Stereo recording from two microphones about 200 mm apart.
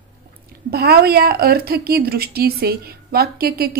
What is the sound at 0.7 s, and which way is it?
A woman's voice, 50° right (ahead or behind).